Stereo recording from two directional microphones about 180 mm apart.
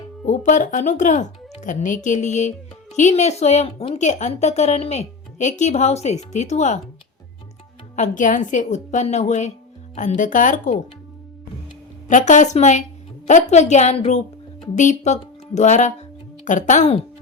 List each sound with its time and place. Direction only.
0.3 s speech: 45° left (ahead or behind)
7.9 s speech: 45° left (ahead or behind)
12.0 s speech: 45° left (ahead or behind)